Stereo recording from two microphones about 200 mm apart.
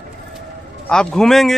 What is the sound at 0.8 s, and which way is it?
Speech, 5° left (ahead or behind).